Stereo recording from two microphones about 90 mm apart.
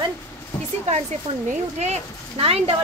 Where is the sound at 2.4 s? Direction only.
90° right.